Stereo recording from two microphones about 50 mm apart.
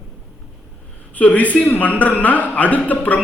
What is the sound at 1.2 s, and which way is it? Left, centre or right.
A man's voice, left.